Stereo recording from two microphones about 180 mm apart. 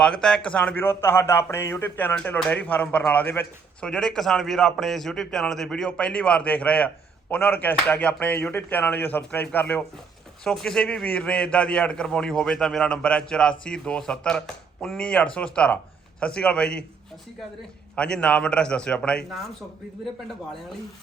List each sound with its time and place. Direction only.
0.0 s a man's voice: 5° left (ahead or behind)
17.9 s a man's voice: 5° left (ahead or behind)